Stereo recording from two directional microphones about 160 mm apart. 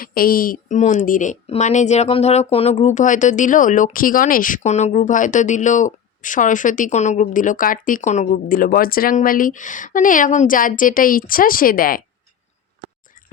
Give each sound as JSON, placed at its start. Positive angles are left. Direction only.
{"t": 0.0, "sound": "speech", "side_deg": 65}